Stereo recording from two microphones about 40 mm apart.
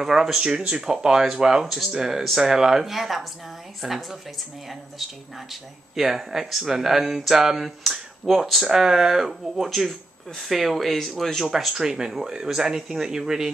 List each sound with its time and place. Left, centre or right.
0.0 s speech: centre
0.4 s speech: right; by 4.2 s centre
5.5 s speech: centre
8.6 s speech: centre
9.8 s speech: centre
11.7 s speech: centre